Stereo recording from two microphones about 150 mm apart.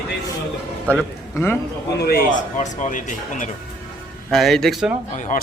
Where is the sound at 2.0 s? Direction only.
90° left.